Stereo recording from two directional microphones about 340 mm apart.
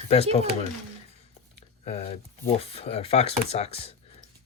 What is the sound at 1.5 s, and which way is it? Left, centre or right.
Speech, centre.